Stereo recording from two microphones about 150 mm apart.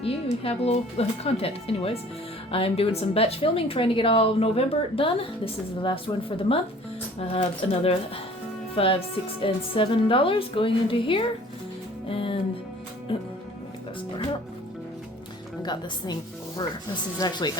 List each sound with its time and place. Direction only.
0.0 s a woman's voice: 40° left (ahead or behind)
12.0 s music: 35° left (ahead or behind)
13.1 s a woman's voice: 35° left (ahead or behind)
15.6 s a woman's voice: 30° left (ahead or behind)
17.2 s a woman's voice: 30° left (ahead or behind)